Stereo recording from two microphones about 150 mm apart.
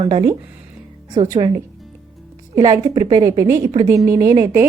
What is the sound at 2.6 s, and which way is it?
A woman's voice, 25° right (ahead or behind).